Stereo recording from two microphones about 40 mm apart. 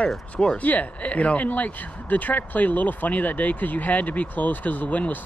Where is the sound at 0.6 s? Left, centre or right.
Left.